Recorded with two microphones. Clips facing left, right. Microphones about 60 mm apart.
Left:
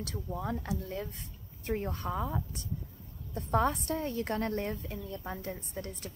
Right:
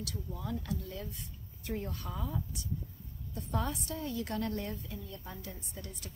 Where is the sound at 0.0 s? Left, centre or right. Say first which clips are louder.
Left 4 dB; left.